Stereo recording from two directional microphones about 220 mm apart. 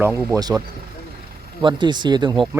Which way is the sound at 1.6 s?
20° right (ahead or behind).